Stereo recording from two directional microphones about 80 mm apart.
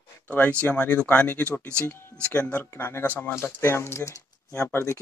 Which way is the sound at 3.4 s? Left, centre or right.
Left.